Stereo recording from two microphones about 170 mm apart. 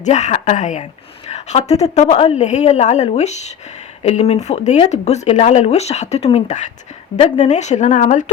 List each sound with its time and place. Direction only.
0.0 s speech: 45° left (ahead or behind)